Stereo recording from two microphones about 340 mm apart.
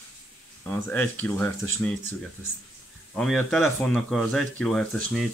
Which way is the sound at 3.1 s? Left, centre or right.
Centre.